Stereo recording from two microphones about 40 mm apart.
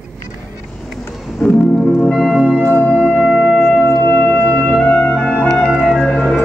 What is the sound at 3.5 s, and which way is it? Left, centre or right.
Music, centre.